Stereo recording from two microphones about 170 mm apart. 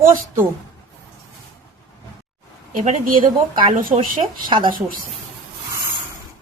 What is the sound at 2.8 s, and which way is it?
A woman's voice, 55° right (ahead or behind).